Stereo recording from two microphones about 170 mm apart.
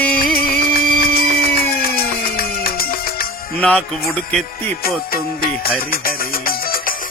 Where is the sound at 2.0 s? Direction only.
60° left (ahead or behind).